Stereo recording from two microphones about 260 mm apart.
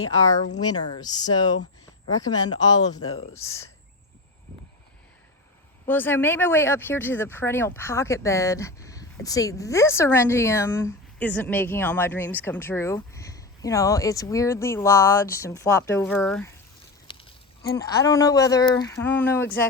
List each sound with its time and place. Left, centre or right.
0.6 s a woman's voice: centre
5.8 s a woman's voice: centre
17.1 s speech: centre